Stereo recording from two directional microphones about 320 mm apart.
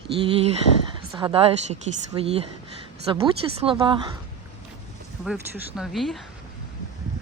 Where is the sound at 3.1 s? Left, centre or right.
Centre.